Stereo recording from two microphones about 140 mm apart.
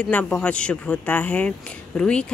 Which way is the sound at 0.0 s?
5° left (ahead or behind).